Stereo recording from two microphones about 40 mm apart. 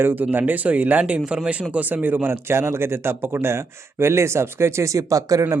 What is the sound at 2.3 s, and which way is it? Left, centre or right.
Speech, right.